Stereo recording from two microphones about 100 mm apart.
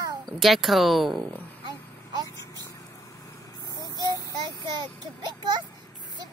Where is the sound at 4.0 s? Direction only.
40° right (ahead or behind).